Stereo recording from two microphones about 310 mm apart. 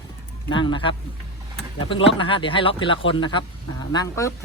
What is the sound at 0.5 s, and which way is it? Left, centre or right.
A man's voice, centre.